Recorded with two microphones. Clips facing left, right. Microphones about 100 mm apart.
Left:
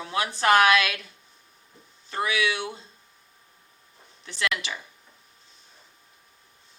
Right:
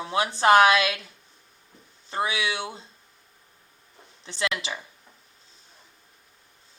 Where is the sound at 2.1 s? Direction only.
25° right (ahead or behind).